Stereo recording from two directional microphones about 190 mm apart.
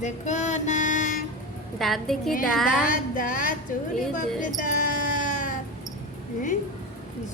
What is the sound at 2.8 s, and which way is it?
Speech, 45° left (ahead or behind).